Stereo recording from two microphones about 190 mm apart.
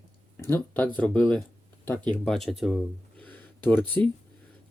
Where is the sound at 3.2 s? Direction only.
10° left (ahead or behind).